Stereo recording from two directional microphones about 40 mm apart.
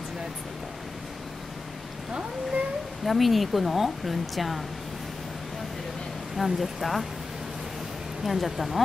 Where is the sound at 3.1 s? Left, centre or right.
Centre.